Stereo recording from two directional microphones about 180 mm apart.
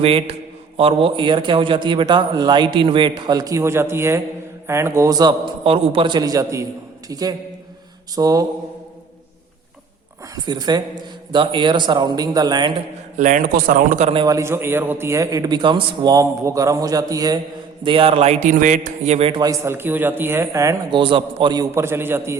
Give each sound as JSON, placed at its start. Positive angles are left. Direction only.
{"t": 0.0, "sound": "a man's voice", "side_deg": -30}
{"t": 5.6, "sound": "a man's voice", "side_deg": -30}
{"t": 10.3, "sound": "a man's voice", "side_deg": -25}
{"t": 13.1, "sound": "a man's voice", "side_deg": -45}
{"t": 14.1, "sound": "a man's voice", "side_deg": -25}
{"t": 14.3, "sound": "a man's voice", "side_deg": -15}
{"t": 19.3, "sound": "a man's voice", "side_deg": -20}